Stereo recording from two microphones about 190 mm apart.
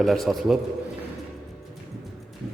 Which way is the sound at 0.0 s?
Centre (ahead or behind).